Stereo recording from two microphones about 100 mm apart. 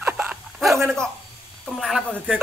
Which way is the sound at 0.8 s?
Centre (ahead or behind).